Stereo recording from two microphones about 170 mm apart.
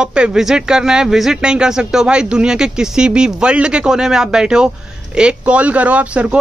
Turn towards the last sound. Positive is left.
turn(degrees=-5)  # may be behind; listen again after turning